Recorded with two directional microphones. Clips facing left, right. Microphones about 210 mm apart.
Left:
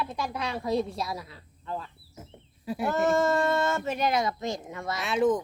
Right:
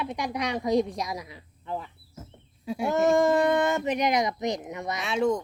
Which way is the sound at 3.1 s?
15° right (ahead or behind).